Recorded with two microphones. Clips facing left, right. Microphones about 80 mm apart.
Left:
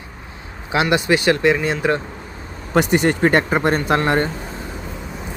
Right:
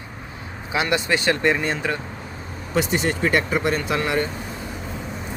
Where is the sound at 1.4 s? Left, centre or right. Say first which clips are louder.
Left 4 dB; centre.